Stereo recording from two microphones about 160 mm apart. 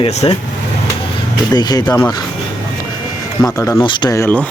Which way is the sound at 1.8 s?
10° left (ahead or behind).